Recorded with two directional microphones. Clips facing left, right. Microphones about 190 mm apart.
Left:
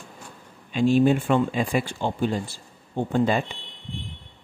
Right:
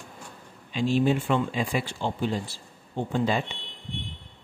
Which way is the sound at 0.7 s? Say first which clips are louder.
Left 5 dB; 55° left (ahead or behind).